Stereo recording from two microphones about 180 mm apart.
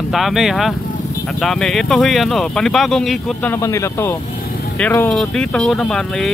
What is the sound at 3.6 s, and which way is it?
Speech, 15° left (ahead or behind).